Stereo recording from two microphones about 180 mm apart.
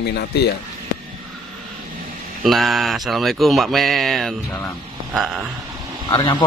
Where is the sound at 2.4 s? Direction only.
Centre (ahead or behind).